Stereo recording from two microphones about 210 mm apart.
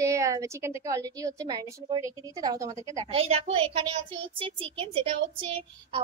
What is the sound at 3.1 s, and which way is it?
A woman's voice, 30° right (ahead or behind).